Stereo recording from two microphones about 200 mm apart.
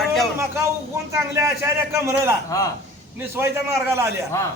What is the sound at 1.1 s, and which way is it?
A man's voice, 15° right (ahead or behind).